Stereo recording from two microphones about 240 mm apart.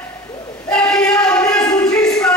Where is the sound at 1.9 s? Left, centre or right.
Centre.